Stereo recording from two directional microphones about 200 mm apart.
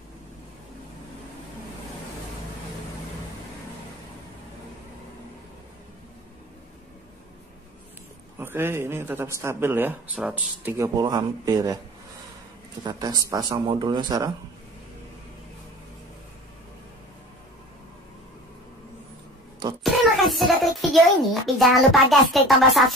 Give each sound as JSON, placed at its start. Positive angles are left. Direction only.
{"t": 8.4, "sound": "a man's voice", "side_deg": -10}
{"t": 12.8, "sound": "speech", "side_deg": -20}
{"t": 19.8, "sound": "a sound", "side_deg": 0}
{"t": 22.3, "sound": "speech", "side_deg": 0}